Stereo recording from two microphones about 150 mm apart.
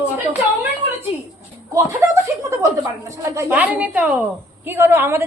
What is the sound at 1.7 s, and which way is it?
Speech, 20° right (ahead or behind).